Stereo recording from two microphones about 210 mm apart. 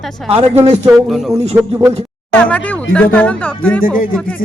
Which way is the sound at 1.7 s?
30° right (ahead or behind).